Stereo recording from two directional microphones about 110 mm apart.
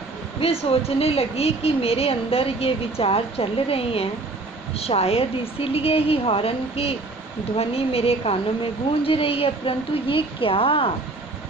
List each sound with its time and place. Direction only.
0.3 s speech: 60° left (ahead or behind)